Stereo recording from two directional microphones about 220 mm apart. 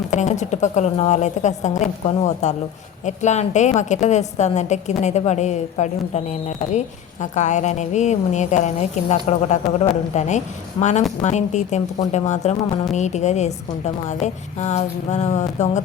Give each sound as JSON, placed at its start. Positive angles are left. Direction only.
{"t": 0.1, "sound": "a woman's voice", "side_deg": 35}